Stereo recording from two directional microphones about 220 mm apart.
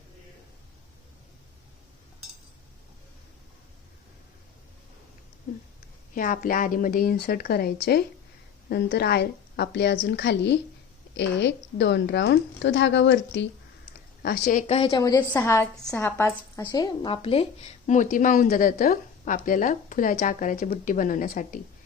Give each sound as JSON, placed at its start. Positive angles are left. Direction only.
{"t": 6.1, "sound": "a woman's voice", "side_deg": 40}
{"t": 14.7, "sound": "a woman's voice", "side_deg": 25}